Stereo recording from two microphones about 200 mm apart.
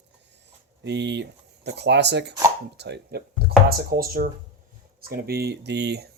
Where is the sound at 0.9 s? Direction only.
60° right (ahead or behind).